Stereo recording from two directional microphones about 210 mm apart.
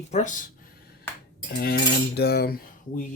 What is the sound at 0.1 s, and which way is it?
Speech, 35° left (ahead or behind).